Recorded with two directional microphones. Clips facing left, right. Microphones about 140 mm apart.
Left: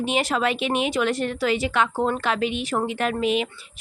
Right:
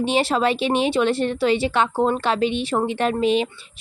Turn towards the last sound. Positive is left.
turn(degrees=-30)  # may be behind; listen again after turning